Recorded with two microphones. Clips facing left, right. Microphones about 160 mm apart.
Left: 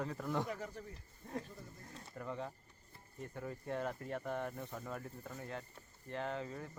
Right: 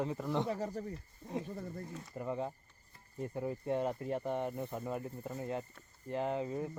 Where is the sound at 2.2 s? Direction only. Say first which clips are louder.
Right 6 dB; 20° right (ahead or behind).